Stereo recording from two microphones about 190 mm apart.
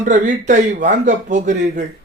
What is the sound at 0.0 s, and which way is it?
Speech, 40° right (ahead or behind).